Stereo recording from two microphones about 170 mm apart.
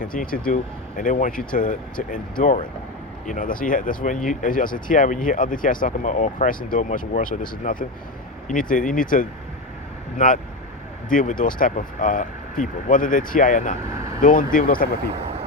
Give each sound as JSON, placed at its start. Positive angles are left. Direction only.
{"t": 0.0, "sound": "speech", "side_deg": 55}
{"t": 13.7, "sound": "speech", "side_deg": -15}
{"t": 14.2, "sound": "speech", "side_deg": 55}